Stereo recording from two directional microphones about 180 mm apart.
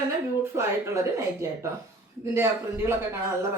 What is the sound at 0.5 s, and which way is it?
Speech, 15° right (ahead or behind).